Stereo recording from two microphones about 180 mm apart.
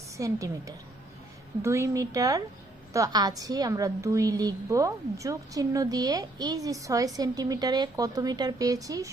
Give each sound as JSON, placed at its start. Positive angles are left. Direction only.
{"t": 0.2, "sound": "a woman's voice", "side_deg": -20}
{"t": 1.6, "sound": "a woman's voice", "side_deg": -15}